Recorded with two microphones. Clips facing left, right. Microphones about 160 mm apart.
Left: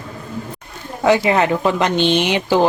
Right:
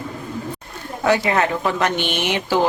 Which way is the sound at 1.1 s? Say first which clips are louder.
Left 4 dB; 20° left (ahead or behind).